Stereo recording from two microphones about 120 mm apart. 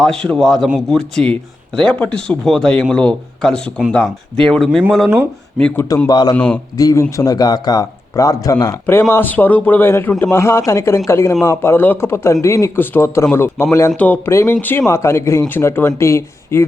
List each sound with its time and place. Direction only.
0.0 s speech: 5° left (ahead or behind)
6.1 s a man's voice: 35° left (ahead or behind)
6.3 s speech: 10° left (ahead or behind)
6.7 s a man's voice: 25° left (ahead or behind)